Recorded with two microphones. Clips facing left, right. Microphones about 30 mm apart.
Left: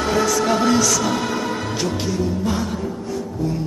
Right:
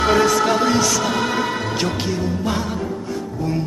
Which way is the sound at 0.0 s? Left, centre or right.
Right.